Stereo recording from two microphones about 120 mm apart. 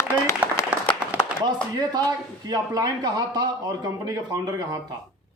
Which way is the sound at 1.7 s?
35° right (ahead or behind).